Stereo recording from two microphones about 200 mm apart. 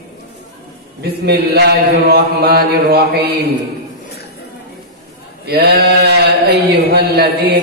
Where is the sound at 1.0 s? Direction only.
55° right (ahead or behind).